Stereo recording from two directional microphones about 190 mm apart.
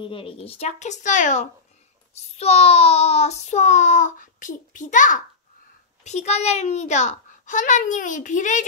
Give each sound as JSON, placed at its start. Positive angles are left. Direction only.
{"t": 0.0, "sound": "child singing", "side_deg": 25}